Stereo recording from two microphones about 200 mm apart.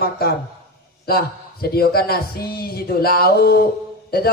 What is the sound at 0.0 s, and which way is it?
A woman's voice, 50° left (ahead or behind).